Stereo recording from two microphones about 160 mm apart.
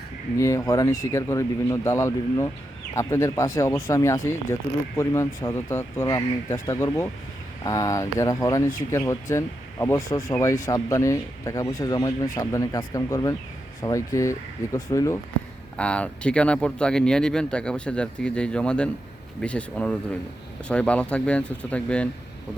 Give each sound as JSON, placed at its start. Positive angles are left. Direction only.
{"t": 0.3, "sound": "speech", "side_deg": 20}
{"t": 15.8, "sound": "speech", "side_deg": 5}